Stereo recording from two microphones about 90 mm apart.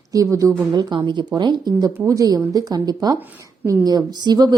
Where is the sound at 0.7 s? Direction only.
55° right (ahead or behind).